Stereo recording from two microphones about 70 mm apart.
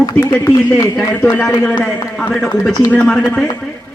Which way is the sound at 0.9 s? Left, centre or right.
Centre.